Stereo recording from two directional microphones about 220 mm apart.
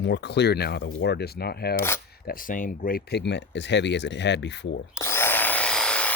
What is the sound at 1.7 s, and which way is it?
Speech, 10° left (ahead or behind).